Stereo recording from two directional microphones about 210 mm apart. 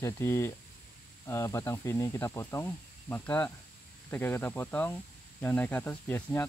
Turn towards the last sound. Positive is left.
turn(degrees=10)  # may be behind; listen again after turning